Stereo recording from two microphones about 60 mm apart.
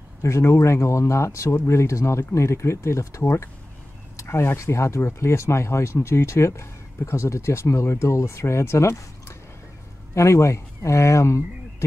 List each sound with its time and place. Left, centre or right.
0.2 s speech: left